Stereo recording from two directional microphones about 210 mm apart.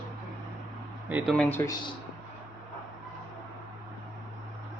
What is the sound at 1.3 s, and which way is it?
Speech, 10° left (ahead or behind).